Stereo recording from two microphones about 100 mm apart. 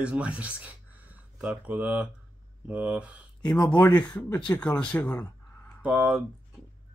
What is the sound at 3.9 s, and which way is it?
Speech, 15° left (ahead or behind).